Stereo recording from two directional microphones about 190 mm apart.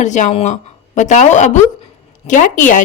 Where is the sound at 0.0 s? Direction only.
40° left (ahead or behind).